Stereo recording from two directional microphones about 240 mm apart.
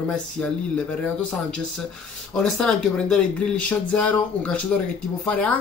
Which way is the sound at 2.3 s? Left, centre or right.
Centre.